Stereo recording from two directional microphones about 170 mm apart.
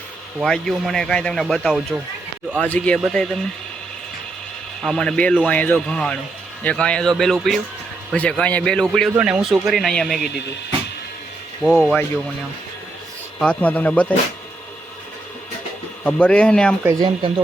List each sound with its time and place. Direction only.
0.4 s a man's voice: centre (ahead or behind)
4.8 s a man's voice: 5° left (ahead or behind)
11.6 s a man's voice: centre (ahead or behind)
13.4 s speech: 5° left (ahead or behind)
16.0 s speech: 5° left (ahead or behind)
16.8 s speech: 20° right (ahead or behind)